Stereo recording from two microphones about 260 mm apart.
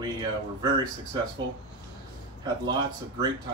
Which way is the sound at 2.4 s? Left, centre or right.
Centre.